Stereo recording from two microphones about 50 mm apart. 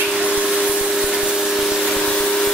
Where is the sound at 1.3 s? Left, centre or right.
Centre.